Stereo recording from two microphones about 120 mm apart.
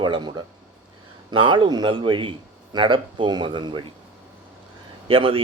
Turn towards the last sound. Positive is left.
turn(degrees=-50)  # may be behind; listen again after turning